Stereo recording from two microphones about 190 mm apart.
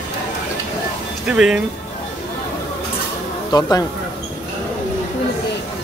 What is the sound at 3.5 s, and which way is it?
Speech, 20° left (ahead or behind).